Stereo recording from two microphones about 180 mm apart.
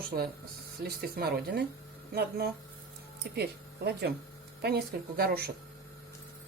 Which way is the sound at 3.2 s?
65° right (ahead or behind).